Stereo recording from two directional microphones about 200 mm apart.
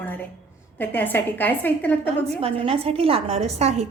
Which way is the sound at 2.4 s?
30° right (ahead or behind).